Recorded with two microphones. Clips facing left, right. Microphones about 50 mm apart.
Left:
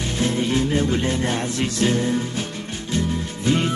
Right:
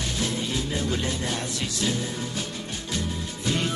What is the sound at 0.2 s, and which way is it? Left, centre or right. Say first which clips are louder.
Music: left 9 dB; left.